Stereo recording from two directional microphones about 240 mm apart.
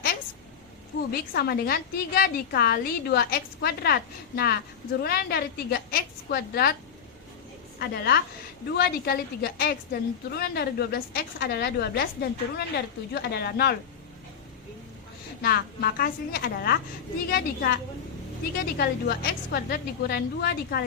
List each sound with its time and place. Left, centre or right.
1.1 s a woman's voice: left
7.8 s a woman's voice: left
15.4 s a woman's voice: left